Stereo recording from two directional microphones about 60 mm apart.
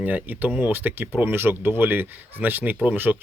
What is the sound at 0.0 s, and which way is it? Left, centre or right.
Speech, right.